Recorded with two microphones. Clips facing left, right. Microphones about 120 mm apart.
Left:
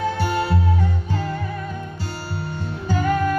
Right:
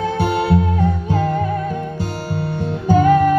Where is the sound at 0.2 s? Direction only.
55° right (ahead or behind).